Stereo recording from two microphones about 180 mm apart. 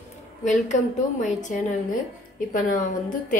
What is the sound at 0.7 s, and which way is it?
A woman's voice, 40° left (ahead or behind).